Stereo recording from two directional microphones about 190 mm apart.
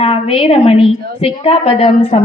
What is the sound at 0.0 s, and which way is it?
A woman's voice, 30° left (ahead or behind).